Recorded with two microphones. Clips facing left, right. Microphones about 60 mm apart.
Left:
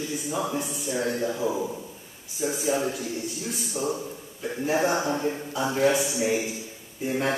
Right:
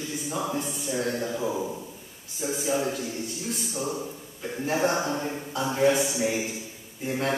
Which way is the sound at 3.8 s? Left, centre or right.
Left.